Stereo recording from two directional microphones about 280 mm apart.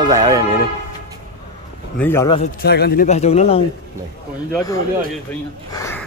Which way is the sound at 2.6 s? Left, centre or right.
Left.